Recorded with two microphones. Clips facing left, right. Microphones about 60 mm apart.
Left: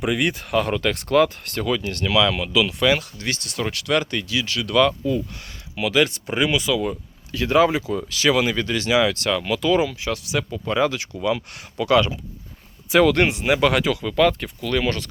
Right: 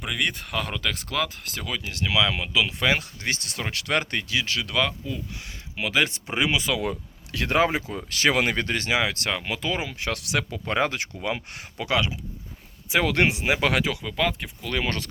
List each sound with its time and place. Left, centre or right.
0.0 s speech: centre; by 4.7 s right
4.7 s speech: centre
5.7 s speech: right
7.3 s speech: right
7.5 s speech: right
9.9 s speech: right
10.7 s speech: right
11.2 s speech: right
11.9 s speech: centre
14.6 s speech: right